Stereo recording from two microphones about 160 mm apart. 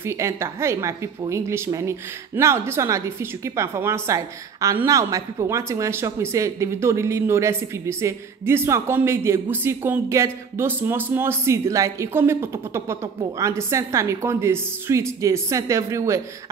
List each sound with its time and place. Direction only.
0.0 s a woman's voice: 15° right (ahead or behind)